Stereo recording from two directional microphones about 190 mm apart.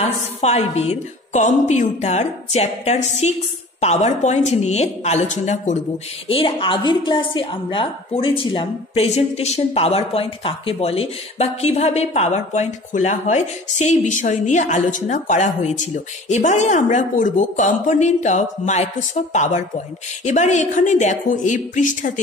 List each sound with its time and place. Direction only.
0.4 s a woman's voice: 35° left (ahead or behind)